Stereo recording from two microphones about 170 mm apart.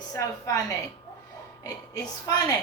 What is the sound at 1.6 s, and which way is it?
Speech, 20° left (ahead or behind).